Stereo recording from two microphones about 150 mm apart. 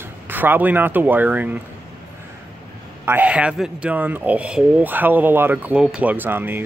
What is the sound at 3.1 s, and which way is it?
Speech, 10° right (ahead or behind).